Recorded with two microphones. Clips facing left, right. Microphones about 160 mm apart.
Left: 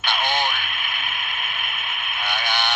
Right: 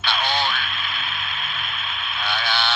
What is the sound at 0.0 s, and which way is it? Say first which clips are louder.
Radio: even; 15° left (ahead or behind).